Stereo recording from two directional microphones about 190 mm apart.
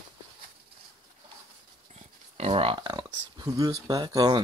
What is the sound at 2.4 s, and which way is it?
Speech, 30° right (ahead or behind).